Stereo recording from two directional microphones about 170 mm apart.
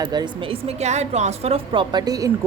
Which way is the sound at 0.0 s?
25° right (ahead or behind).